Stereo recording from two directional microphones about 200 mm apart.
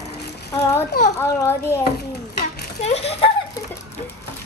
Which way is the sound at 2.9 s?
30° left (ahead or behind).